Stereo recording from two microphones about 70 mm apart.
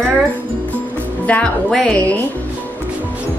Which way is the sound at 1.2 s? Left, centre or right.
Left.